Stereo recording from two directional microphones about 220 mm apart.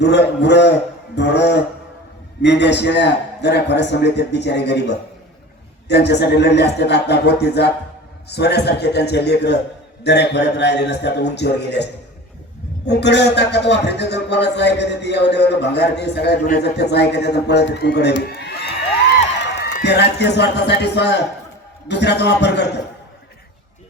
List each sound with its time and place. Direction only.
0.0 s a man's voice: 50° left (ahead or behind)